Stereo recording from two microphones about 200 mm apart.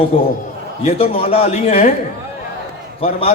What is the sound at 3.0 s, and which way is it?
Speech, 30° left (ahead or behind).